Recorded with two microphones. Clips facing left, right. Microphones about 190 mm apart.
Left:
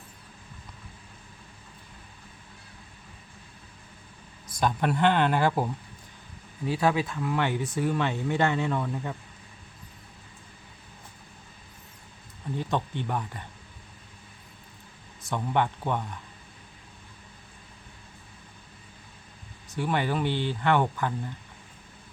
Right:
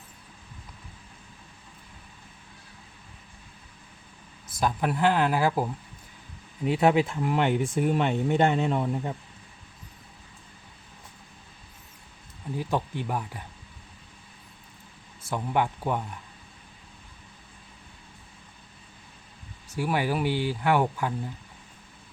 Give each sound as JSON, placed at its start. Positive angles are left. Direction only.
{"t": 4.6, "sound": "speech", "side_deg": -5}
{"t": 6.7, "sound": "speech", "side_deg": -20}
{"t": 12.5, "sound": "speech", "side_deg": -5}
{"t": 15.2, "sound": "speech", "side_deg": -5}
{"t": 19.7, "sound": "speech", "side_deg": -5}